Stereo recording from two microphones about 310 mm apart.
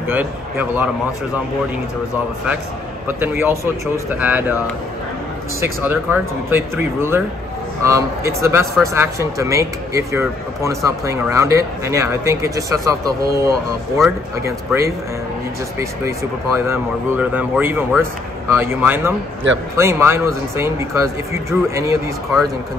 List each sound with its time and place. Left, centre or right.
0.1 s speech: centre
3.1 s speech: centre
5.6 s speech: centre
13.9 s speech: centre
19.4 s a man's voice: right
19.8 s speech: centre